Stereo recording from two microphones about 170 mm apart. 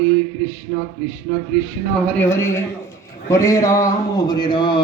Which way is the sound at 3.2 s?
20° left (ahead or behind).